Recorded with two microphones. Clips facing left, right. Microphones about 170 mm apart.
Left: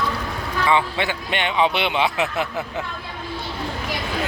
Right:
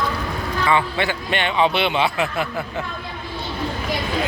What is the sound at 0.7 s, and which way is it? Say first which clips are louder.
Speech: even; 15° left (ahead or behind).